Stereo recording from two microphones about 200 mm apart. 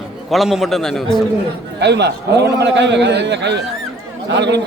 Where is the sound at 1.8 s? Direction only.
60° right (ahead or behind).